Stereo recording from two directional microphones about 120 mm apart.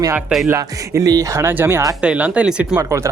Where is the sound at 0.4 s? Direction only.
25° right (ahead or behind).